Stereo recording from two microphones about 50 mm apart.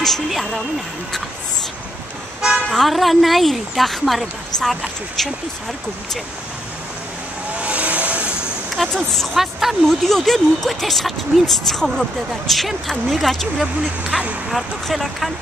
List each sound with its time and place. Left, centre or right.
0.0 s speech: centre
2.7 s speech: centre
7.5 s vehicle: right
8.8 s speech: centre
14.1 s speech: centre
14.5 s speech: centre